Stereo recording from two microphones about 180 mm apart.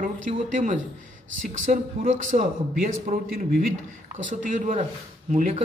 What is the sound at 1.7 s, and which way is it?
A man's voice, 45° right (ahead or behind).